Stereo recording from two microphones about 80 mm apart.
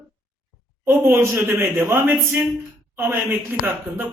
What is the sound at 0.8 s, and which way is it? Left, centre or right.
A man's voice, right.